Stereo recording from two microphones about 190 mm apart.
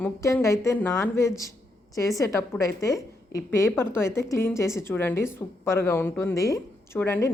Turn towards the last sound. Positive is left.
turn(degrees=15)  # may be behind; listen again after turning